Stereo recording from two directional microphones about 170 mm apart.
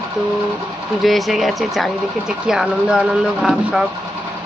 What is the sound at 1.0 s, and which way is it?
Speech, centre (ahead or behind).